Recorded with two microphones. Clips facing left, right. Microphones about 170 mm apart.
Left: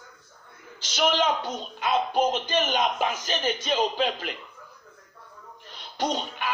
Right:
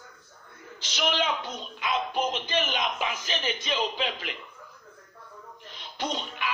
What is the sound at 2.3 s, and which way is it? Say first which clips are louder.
Speech: left 4 dB; 45° left (ahead or behind).